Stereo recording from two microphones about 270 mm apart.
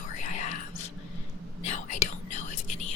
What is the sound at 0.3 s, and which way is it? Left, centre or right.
Whispering, left.